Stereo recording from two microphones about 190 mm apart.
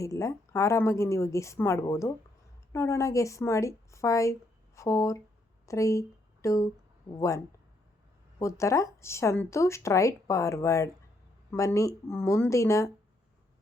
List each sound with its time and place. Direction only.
0.0 s a woman's voice: 15° left (ahead or behind)